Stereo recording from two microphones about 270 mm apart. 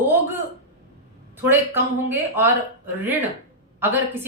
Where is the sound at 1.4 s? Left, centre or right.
Centre.